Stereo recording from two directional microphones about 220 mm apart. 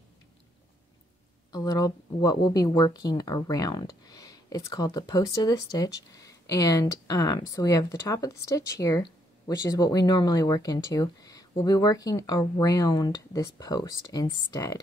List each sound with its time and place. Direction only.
1.5 s speech: 15° left (ahead or behind)